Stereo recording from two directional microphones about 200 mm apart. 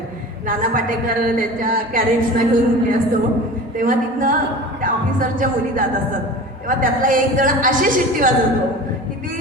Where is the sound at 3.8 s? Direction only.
40° right (ahead or behind).